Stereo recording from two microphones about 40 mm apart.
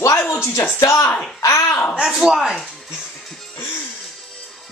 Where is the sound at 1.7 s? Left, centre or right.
Left.